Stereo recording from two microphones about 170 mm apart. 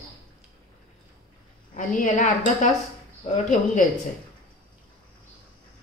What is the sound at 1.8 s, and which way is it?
Speech, 50° left (ahead or behind).